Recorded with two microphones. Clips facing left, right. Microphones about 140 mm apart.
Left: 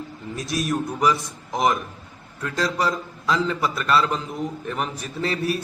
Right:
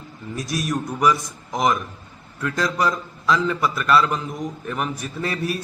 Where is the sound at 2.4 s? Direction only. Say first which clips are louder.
Right 2 dB; 30° left (ahead or behind).